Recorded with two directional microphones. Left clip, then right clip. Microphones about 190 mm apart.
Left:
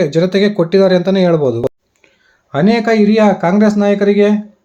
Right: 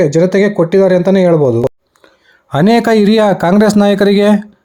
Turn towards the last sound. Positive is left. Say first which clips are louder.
# right 2 dB
turn(degrees=-60)  # may be behind; listen again after turning